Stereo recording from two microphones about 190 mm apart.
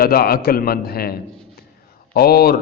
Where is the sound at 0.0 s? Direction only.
55° left (ahead or behind).